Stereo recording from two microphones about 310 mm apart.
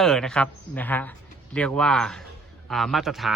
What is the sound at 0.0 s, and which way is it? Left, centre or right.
A woman's voice, centre.